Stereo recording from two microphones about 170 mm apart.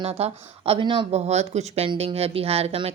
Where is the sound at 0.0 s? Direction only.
35° right (ahead or behind).